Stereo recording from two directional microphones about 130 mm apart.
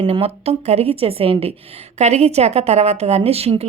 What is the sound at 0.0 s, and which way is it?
A woman's voice, 50° right (ahead or behind).